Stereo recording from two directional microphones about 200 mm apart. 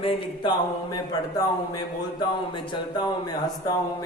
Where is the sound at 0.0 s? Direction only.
25° left (ahead or behind).